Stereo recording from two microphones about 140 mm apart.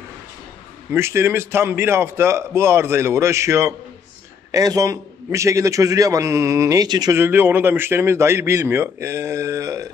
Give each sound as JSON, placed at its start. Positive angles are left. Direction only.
{"t": 0.9, "sound": "a man's voice", "side_deg": -20}
{"t": 7.2, "sound": "a man's voice", "side_deg": -15}